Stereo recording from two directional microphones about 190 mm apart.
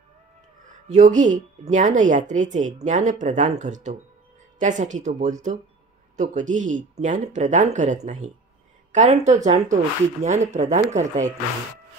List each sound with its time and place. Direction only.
0.8 s speech: 40° right (ahead or behind)